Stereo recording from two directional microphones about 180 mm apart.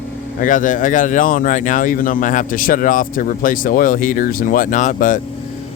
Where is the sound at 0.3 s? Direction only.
45° left (ahead or behind).